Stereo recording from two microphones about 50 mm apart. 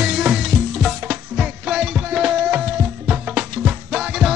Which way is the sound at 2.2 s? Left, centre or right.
Right.